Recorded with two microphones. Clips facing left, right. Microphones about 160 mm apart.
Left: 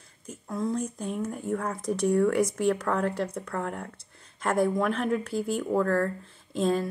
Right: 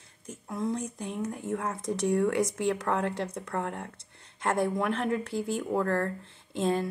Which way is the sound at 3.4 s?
25° right (ahead or behind).